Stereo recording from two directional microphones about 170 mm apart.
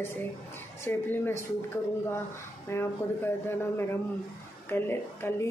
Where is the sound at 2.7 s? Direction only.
15° left (ahead or behind).